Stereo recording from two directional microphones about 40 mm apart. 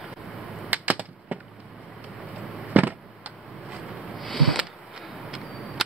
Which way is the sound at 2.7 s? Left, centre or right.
Right.